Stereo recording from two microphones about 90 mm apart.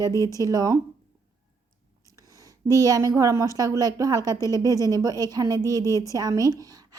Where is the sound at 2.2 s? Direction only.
40° right (ahead or behind).